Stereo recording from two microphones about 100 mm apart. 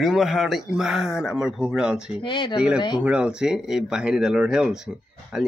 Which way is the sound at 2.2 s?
55° left (ahead or behind).